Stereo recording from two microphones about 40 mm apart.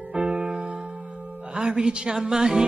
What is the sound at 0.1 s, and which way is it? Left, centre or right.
Music, right.